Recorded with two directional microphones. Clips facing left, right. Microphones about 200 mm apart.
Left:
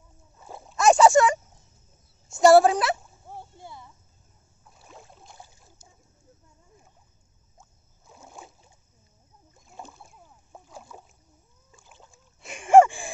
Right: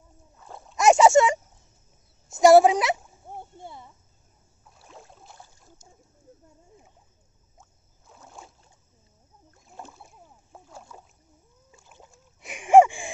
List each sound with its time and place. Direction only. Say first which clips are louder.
0.4 s splash: left 2 dB; 5° left (ahead or behind)
0.7 s a sound: right 1 dB; 20° right (ahead or behind)
4.7 s boat: right 1 dB; centre (ahead or behind)
8.2 s boat: left 1 dB; 10° left (ahead or behind)
9.8 s rowboat: even; 5° right (ahead or behind)
12.0 s rowboat: right 2 dB; 15° right (ahead or behind)